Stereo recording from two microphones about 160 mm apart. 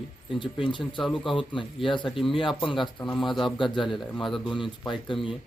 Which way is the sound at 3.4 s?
30° left (ahead or behind).